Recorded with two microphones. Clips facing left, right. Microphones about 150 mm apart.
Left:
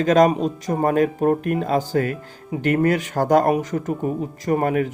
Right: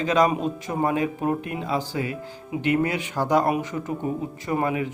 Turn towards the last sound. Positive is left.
turn(degrees=50)  # may be behind; listen again after turning